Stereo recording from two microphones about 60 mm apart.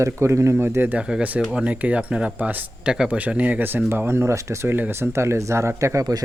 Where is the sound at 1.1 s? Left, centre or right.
Centre.